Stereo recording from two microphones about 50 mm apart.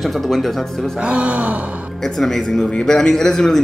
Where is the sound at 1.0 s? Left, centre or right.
Right.